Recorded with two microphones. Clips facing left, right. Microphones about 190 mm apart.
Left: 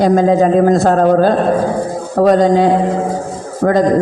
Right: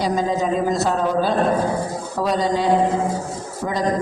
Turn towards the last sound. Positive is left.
turn(degrees=55)  # may be behind; listen again after turning